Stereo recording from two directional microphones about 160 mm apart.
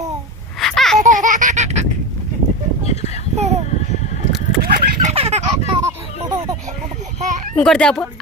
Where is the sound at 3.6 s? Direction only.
45° left (ahead or behind).